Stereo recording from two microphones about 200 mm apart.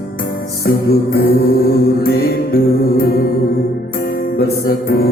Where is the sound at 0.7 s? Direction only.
50° left (ahead or behind).